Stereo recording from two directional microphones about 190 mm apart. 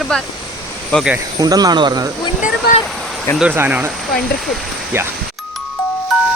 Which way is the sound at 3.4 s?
10° right (ahead or behind).